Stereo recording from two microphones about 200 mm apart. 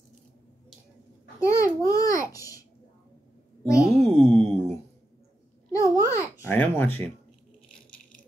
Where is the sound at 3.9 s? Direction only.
30° right (ahead or behind).